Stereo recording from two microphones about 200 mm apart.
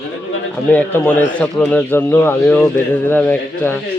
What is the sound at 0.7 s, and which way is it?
A man's voice, 10° left (ahead or behind).